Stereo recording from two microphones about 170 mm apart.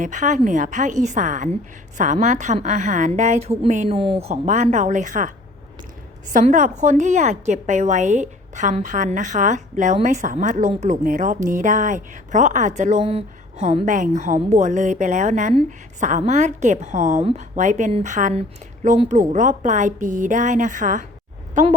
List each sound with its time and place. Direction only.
0.0 s a woman's voice: 45° right (ahead or behind)
6.3 s a woman's voice: 50° right (ahead or behind)